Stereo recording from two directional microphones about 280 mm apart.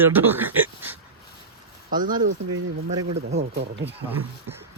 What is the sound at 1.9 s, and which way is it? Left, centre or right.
Speech, right.